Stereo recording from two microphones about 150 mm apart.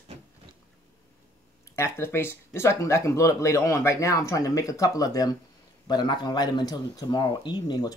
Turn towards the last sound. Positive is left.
turn(degrees=30)  # may be behind; listen again after turning